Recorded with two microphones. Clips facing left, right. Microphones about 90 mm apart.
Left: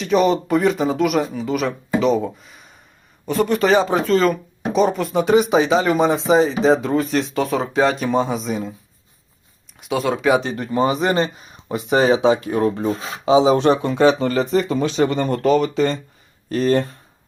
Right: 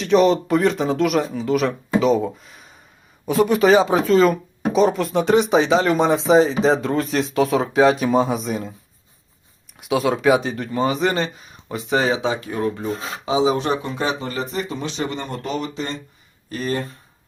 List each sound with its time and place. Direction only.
0.0 s speech: centre (ahead or behind)
9.7 s speech: centre (ahead or behind)
10.7 s speech: 30° left (ahead or behind)
13.7 s speech: 65° left (ahead or behind)
14.3 s speech: 90° left
14.9 s speech: 60° left (ahead or behind); by 15.6 s 75° left (ahead or behind)